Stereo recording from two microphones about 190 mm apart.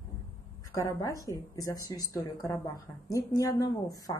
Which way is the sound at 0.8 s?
15° left (ahead or behind).